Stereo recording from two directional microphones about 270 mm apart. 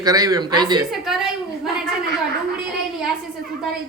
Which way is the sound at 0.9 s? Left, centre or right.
Centre.